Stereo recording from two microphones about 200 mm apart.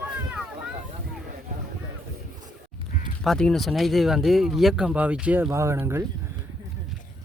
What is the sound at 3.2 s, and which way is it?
Speech, 5° left (ahead or behind).